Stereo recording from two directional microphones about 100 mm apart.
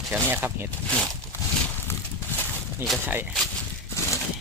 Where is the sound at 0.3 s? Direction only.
20° right (ahead or behind).